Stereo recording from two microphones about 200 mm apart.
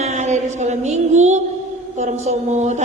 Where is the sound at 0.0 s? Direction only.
35° right (ahead or behind).